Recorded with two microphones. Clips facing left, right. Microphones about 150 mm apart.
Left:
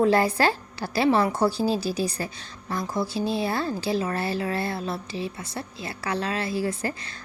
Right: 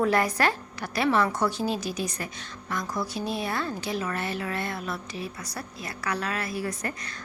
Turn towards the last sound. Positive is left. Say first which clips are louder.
# left 4 dB
turn(degrees=30)  # may be behind; listen again after turning